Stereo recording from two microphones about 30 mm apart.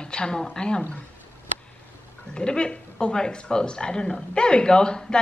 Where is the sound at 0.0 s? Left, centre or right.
Left.